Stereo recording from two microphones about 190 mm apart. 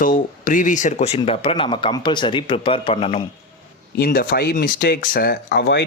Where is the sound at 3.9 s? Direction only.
50° left (ahead or behind).